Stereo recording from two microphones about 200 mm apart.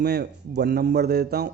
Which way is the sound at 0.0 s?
50° right (ahead or behind).